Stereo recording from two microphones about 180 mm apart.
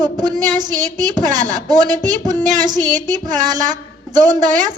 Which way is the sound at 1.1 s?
25° right (ahead or behind).